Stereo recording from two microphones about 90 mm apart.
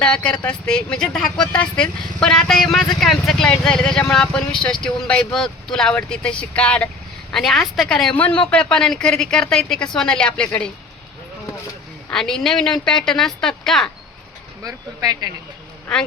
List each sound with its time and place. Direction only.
0.0 s a woman's voice: 10° left (ahead or behind)
12.1 s a woman's voice: 5° left (ahead or behind)
14.6 s speech: 45° right (ahead or behind)
15.9 s speech: 5° left (ahead or behind)